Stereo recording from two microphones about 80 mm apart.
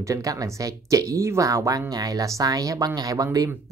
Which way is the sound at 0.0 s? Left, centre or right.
Right.